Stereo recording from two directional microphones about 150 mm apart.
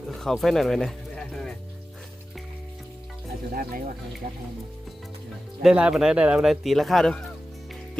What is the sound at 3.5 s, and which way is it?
Speech, 70° right (ahead or behind).